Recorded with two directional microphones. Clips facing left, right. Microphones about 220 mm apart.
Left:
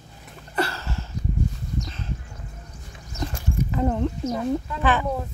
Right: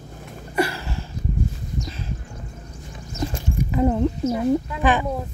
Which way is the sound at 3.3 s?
10° right (ahead or behind).